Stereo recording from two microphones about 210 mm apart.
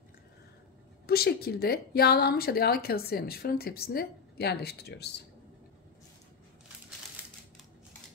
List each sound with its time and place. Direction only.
1.0 s a woman's voice: 45° left (ahead or behind)